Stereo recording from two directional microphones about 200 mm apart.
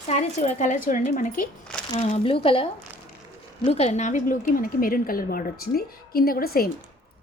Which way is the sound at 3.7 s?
30° left (ahead or behind).